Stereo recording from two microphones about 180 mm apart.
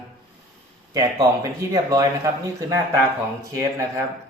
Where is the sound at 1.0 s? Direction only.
20° right (ahead or behind).